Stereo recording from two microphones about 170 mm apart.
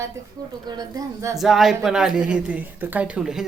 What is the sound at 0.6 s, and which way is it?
Speech, 25° right (ahead or behind).